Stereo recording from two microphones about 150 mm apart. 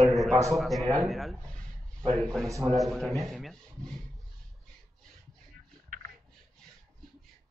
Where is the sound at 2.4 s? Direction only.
20° right (ahead or behind).